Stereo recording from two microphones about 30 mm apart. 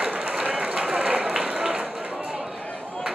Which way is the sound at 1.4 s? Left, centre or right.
Right.